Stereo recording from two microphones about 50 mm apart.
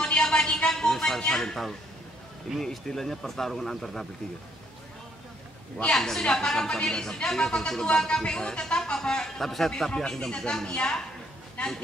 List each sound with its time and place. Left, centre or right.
0.0 s a sound: centre
1.4 s speech: centre
5.9 s a man's voice: centre